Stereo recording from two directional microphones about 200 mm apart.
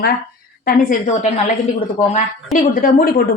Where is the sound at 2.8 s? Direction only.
45° left (ahead or behind).